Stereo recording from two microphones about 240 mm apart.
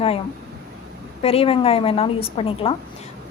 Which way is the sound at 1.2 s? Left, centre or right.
Left.